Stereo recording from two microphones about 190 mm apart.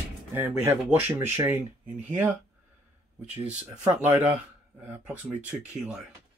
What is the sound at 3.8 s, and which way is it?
Speech, 10° right (ahead or behind).